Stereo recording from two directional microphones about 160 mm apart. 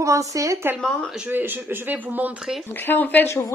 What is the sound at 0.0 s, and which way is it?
Speech, 20° right (ahead or behind).